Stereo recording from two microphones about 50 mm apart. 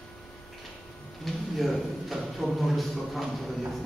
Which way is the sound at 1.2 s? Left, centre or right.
Centre.